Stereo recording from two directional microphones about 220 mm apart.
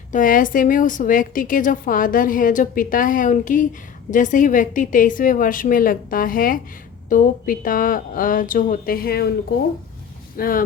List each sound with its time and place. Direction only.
0.1 s a woman's voice: 35° left (ahead or behind)
10.3 s speech: 40° left (ahead or behind)